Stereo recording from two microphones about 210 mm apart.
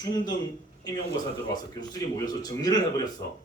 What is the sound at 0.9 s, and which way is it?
A man's voice, 20° left (ahead or behind).